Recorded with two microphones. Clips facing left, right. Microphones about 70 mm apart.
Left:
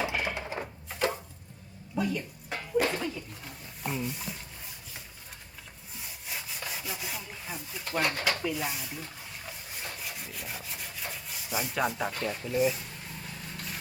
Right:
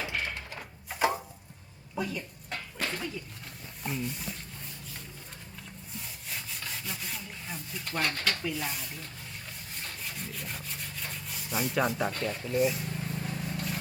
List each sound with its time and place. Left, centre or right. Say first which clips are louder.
0.0 s a sound: left 4 dB; centre
0.9 s tick-tock: right 3 dB; centre
2.0 s speech: left 3 dB; centre
6.0 s sawing: left 1 dB; centre
9.5 s rub: left 3 dB; centre